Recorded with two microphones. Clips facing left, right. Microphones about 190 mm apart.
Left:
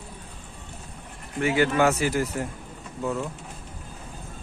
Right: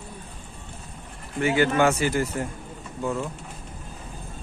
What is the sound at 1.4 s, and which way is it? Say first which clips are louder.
Speech: right 1 dB; centre (ahead or behind).